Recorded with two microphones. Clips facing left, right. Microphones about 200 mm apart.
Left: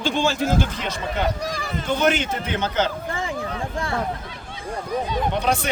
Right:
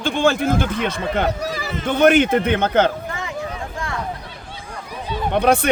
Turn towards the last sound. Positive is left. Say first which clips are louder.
# right 6 dB
turn(degrees=-55)  # may be behind; listen again after turning